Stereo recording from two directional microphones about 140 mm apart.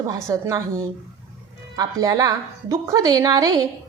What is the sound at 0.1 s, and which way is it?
A woman's voice, 25° right (ahead or behind).